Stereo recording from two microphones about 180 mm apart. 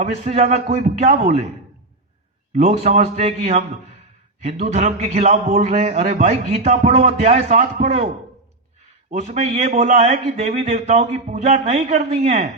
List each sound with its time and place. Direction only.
0.0 s a man's voice: 35° right (ahead or behind)
2.6 s a man's voice: 35° right (ahead or behind)
9.0 s a man's voice: 40° right (ahead or behind)